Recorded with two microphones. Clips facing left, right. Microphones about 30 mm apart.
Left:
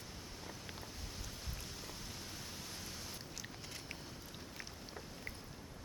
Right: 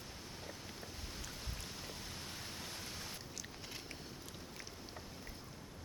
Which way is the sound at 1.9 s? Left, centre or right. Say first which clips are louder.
Right 1 dB; centre.